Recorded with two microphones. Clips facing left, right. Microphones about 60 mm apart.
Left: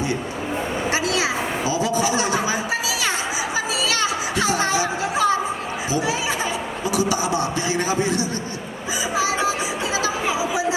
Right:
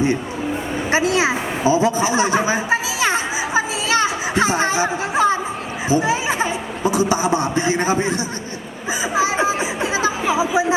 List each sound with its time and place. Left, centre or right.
0.9 s a sound: right
5.9 s a man's voice: right
9.1 s chatter: right